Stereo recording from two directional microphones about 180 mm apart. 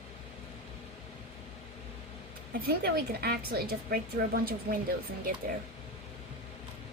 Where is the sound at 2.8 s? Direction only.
60° right (ahead or behind).